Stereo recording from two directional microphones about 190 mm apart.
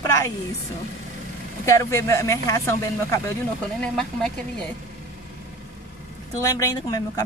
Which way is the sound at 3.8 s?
5° left (ahead or behind).